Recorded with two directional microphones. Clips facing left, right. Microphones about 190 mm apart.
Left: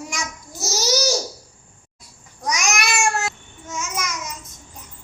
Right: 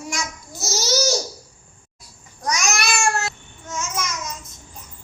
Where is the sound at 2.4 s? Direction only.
15° left (ahead or behind).